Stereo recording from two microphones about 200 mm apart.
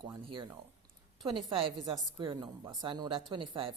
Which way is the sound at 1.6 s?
25° right (ahead or behind).